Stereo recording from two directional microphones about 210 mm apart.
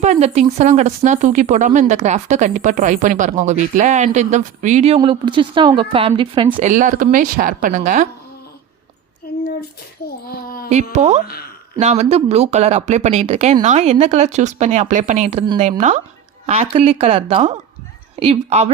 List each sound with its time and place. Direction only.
0.0 s a woman's voice: 30° right (ahead or behind)
6.7 s speech: 35° right (ahead or behind)
9.2 s a sound: 45° left (ahead or behind)
10.9 s a woman's voice: 30° right (ahead or behind)